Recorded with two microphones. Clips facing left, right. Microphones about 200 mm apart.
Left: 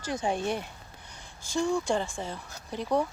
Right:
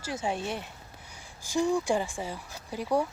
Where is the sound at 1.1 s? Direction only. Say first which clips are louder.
Right 2 dB; 15° right (ahead or behind).